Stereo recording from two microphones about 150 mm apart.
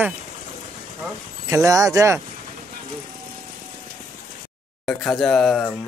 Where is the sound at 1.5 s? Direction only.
20° right (ahead or behind).